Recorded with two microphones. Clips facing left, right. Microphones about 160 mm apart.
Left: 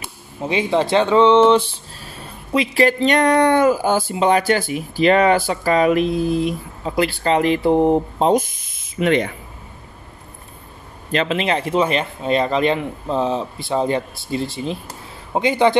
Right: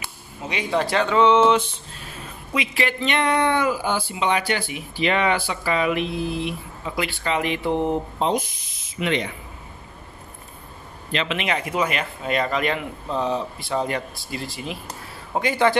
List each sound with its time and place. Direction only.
0.4 s speech: 25° left (ahead or behind); by 9.3 s 50° left (ahead or behind)
11.1 s speech: 40° left (ahead or behind); by 15.8 s 20° left (ahead or behind)